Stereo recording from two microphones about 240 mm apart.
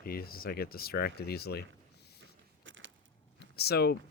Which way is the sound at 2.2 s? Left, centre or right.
Right.